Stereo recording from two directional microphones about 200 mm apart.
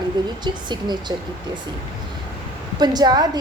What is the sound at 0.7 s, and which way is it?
Speech, 20° right (ahead or behind).